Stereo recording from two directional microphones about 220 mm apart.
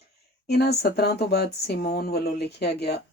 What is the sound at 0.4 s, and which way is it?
Speech, 45° left (ahead or behind).